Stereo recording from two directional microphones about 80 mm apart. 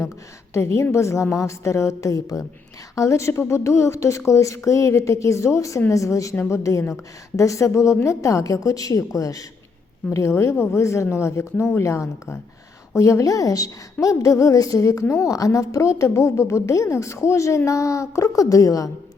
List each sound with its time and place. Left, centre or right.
0.5 s a woman's voice: left